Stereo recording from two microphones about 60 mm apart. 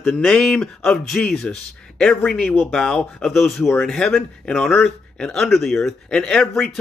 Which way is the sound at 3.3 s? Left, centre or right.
Centre.